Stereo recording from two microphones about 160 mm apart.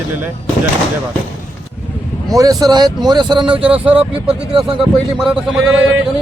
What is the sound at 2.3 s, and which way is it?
Speech, 20° right (ahead or behind).